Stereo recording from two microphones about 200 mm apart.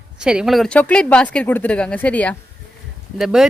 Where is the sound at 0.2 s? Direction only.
5° right (ahead or behind).